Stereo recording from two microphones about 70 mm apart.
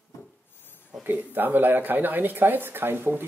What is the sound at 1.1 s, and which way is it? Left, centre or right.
Speech, right.